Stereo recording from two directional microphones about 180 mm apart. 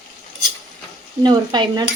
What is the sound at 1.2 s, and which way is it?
Speech, 25° right (ahead or behind).